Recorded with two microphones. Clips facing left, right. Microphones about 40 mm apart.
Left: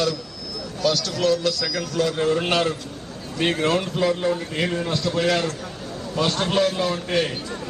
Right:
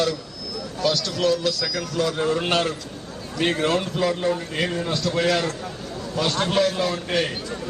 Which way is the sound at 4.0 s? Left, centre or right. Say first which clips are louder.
Left 1 dB; centre.